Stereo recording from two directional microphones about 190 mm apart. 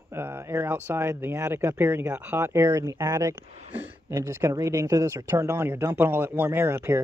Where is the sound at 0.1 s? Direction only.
10° right (ahead or behind).